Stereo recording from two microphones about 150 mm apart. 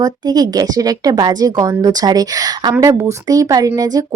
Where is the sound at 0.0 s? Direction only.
25° right (ahead or behind).